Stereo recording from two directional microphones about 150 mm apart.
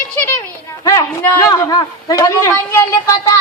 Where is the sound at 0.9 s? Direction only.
25° left (ahead or behind).